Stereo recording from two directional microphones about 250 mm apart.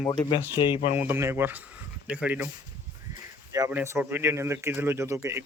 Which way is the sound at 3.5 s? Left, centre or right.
Centre.